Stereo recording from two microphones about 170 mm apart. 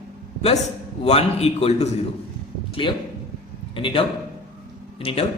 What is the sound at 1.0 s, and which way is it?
A man's voice, 40° left (ahead or behind).